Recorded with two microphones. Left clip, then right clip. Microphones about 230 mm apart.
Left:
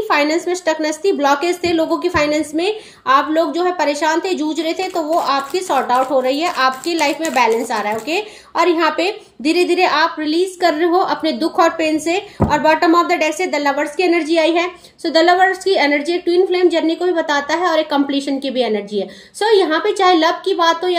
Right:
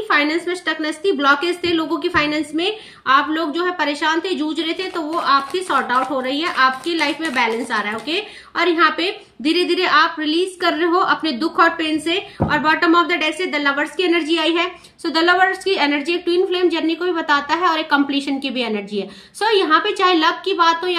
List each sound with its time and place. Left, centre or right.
0.1 s a woman's voice: centre